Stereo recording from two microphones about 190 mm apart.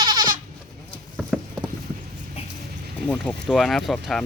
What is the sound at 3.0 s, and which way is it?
Wind chime, 5° left (ahead or behind).